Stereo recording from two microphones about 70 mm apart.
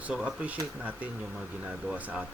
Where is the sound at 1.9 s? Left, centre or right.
Right.